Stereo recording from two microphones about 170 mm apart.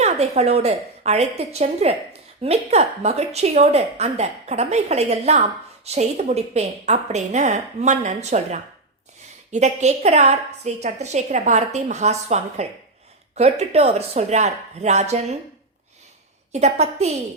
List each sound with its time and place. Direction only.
0.0 s a woman's voice: 40° right (ahead or behind)
16.5 s a woman's voice: 40° right (ahead or behind)